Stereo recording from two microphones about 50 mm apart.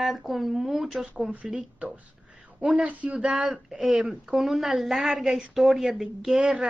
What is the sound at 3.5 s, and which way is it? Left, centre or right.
A woman's voice, centre.